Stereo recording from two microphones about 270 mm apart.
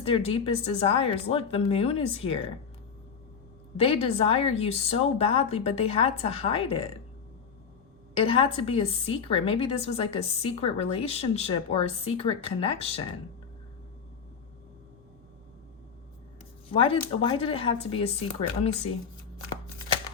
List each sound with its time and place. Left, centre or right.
0.0 s a woman's voice: left
3.8 s a woman's voice: left
8.1 s a woman's voice: centre
16.7 s a woman's voice: centre